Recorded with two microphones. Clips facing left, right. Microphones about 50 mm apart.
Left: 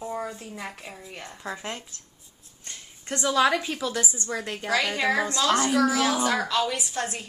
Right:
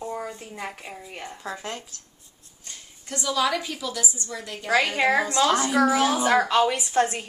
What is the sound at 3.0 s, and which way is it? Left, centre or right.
A woman's voice, left.